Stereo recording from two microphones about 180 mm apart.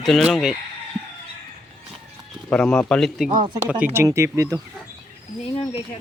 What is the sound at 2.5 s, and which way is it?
Speech, 5° left (ahead or behind).